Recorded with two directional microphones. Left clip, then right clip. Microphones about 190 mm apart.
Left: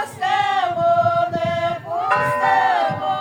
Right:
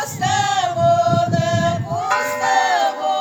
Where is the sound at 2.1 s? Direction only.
50° right (ahead or behind).